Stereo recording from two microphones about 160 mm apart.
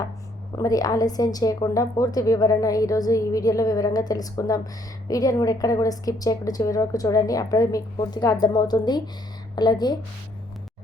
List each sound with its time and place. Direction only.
0.5 s a woman's voice: 20° left (ahead or behind)